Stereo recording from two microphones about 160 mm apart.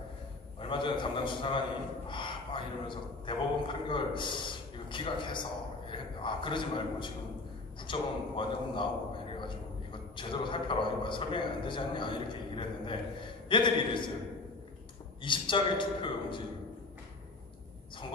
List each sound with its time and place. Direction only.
0.6 s a man's voice: 30° left (ahead or behind)
10.1 s a man's voice: 30° left (ahead or behind)
15.2 s a man's voice: 30° left (ahead or behind)